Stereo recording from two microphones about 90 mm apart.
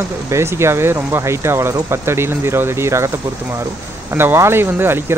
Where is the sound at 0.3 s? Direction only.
30° right (ahead or behind).